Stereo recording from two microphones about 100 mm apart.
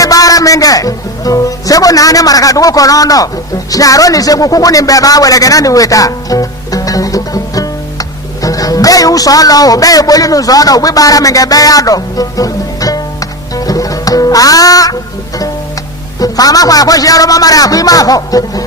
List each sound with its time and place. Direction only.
0.0 s a man's voice: 35° left (ahead or behind)
16.2 s a man's voice: 40° left (ahead or behind)